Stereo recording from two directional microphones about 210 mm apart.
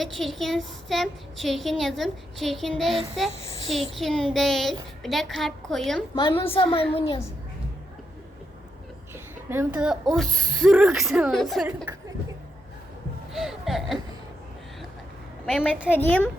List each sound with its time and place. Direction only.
0.2 s a woman's voice: centre (ahead or behind)
3.3 s a woman's voice: 30° left (ahead or behind)
3.9 s a woman's voice: centre (ahead or behind)
6.1 s a woman's voice: 25° left (ahead or behind)
9.1 s a woman's voice: 10° right (ahead or behind)
13.3 s speech: centre (ahead or behind)
15.4 s a woman's voice: centre (ahead or behind)